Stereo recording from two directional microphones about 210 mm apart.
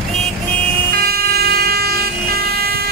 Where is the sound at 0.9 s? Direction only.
45° right (ahead or behind).